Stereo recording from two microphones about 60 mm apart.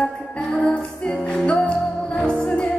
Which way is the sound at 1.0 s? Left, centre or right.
Centre.